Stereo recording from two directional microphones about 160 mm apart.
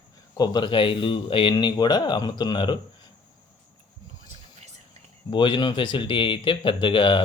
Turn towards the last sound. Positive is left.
turn(degrees=30)  # may be behind; listen again after turning